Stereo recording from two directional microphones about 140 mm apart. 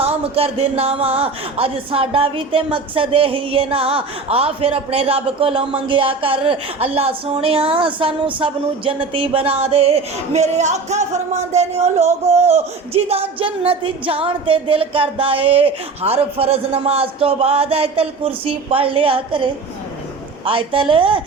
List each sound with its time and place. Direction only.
0.0 s a woman's voice: 45° right (ahead or behind)